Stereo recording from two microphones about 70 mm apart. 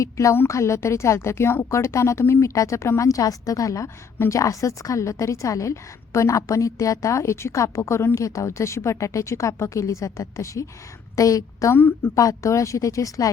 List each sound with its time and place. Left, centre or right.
0.0 s a woman's voice: left
11.7 s a woman's voice: left
12.1 s a woman's voice: left